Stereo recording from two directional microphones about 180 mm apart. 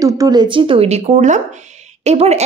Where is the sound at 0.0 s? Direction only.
20° right (ahead or behind).